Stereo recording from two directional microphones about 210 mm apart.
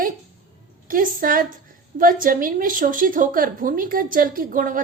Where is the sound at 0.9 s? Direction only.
40° right (ahead or behind).